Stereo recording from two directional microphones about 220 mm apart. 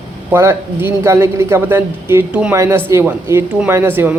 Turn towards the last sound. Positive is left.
turn(degrees=-10)  # may be behind; listen again after turning